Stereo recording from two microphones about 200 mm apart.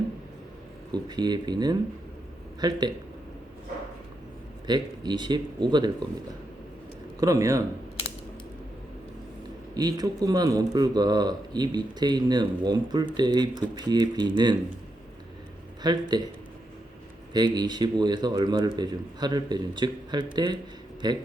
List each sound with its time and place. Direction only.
0.9 s a man's voice: 20° right (ahead or behind)
4.6 s a man's voice: 20° right (ahead or behind)
7.2 s speech: 15° right (ahead or behind)
9.7 s a man's voice: 20° right (ahead or behind)
15.8 s a man's voice: 20° right (ahead or behind)
17.3 s a man's voice: 20° right (ahead or behind)